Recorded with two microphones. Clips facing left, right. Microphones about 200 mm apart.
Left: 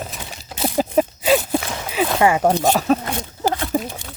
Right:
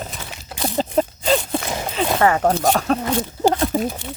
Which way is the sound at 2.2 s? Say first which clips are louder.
Left 1 dB; 10° left (ahead or behind).